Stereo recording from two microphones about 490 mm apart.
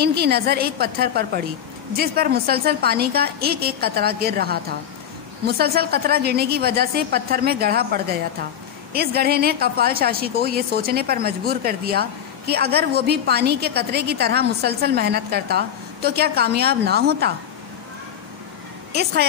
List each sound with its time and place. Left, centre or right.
0.0 s a woman's voice: centre